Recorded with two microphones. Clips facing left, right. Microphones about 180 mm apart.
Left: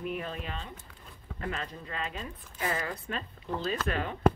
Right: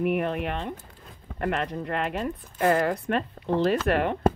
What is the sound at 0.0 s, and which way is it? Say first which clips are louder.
A woman's voice: right 10 dB; 65° right (ahead or behind).